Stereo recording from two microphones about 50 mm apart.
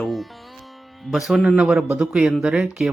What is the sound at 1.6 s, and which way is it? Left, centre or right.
Speech, centre.